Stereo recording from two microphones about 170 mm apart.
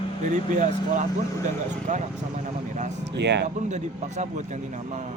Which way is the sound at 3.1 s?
90° right.